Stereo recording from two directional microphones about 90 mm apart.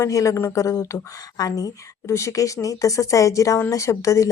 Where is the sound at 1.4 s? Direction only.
45° left (ahead or behind).